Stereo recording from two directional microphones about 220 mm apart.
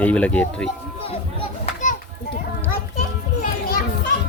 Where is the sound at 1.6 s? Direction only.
35° left (ahead or behind).